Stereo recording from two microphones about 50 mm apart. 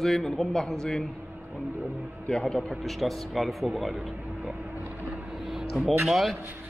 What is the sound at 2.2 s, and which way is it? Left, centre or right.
Speech, centre.